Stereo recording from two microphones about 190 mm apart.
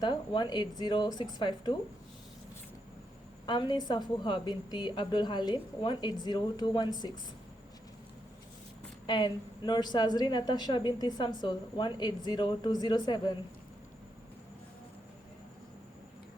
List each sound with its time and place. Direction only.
0.0 s a woman's voice: 25° left (ahead or behind)
3.4 s a woman's voice: 25° left (ahead or behind)
9.0 s a woman's voice: 25° left (ahead or behind)